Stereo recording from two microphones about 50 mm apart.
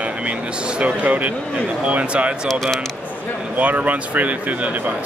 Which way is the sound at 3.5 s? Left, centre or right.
Right.